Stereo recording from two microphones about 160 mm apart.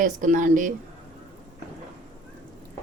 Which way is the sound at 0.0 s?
55° right (ahead or behind).